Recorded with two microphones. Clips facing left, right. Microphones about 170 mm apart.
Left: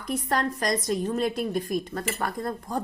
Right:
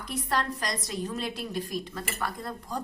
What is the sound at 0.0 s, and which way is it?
A woman's voice, 45° left (ahead or behind).